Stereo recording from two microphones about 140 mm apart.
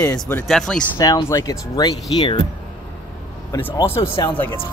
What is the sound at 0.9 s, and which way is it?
Speech, 20° left (ahead or behind).